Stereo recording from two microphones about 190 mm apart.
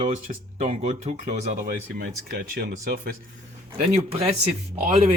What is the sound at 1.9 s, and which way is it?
Speech, 55° right (ahead or behind).